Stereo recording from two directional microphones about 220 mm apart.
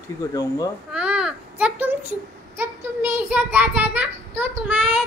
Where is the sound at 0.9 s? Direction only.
5° right (ahead or behind).